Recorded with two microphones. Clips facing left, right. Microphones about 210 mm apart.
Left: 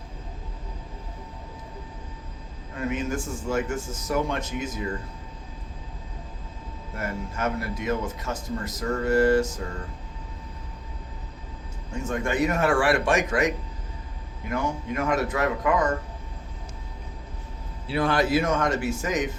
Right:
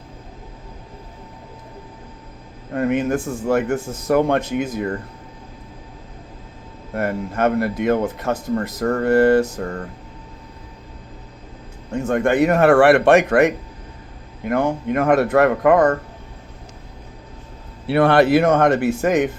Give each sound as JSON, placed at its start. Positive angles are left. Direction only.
{"t": 2.7, "sound": "speech", "side_deg": -60}
{"t": 6.9, "sound": "speech", "side_deg": -60}
{"t": 11.9, "sound": "speech", "side_deg": -60}
{"t": 17.8, "sound": "speech", "side_deg": -65}